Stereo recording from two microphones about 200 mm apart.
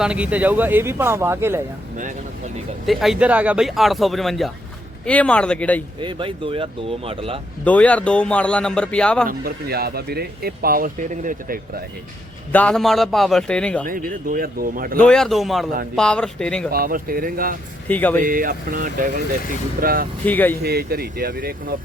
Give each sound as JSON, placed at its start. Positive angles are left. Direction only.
{"t": 0.0, "sound": "speech", "side_deg": -5}
{"t": 2.8, "sound": "speech", "side_deg": 0}
{"t": 6.0, "sound": "speech", "side_deg": -25}
{"t": 7.6, "sound": "speech", "side_deg": 5}
{"t": 9.2, "sound": "speech", "side_deg": -50}
{"t": 12.5, "sound": "speech", "side_deg": 5}
{"t": 13.8, "sound": "speech", "side_deg": -45}
{"t": 14.9, "sound": "speech", "side_deg": 5}
{"t": 16.7, "sound": "speech", "side_deg": -45}
{"t": 17.8, "sound": "speech", "side_deg": 10}
{"t": 18.2, "sound": "speech", "side_deg": -45}
{"t": 20.2, "sound": "speech", "side_deg": 10}
{"t": 20.6, "sound": "speech", "side_deg": -50}